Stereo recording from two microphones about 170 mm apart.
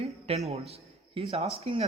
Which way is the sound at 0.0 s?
35° right (ahead or behind).